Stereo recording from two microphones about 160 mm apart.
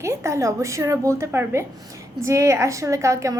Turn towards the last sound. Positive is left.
turn(degrees=-20)  # may be behind; listen again after turning